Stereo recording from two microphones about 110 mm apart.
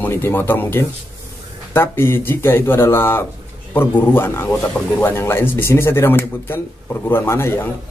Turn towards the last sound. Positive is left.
turn(degrees=20)  # may be behind; listen again after turning